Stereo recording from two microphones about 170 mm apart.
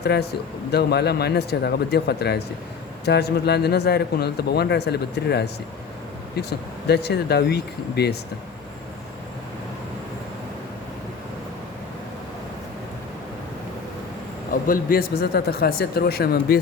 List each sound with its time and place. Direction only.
0.0 s speech: 75° left (ahead or behind)
14.5 s speech: 55° left (ahead or behind)